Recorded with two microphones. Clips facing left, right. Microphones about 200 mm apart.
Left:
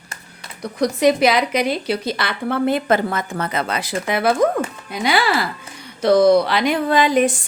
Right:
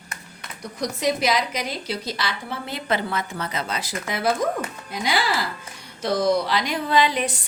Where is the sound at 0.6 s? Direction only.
65° left (ahead or behind).